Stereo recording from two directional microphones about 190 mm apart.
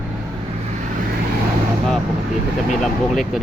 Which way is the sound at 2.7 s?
Centre (ahead or behind).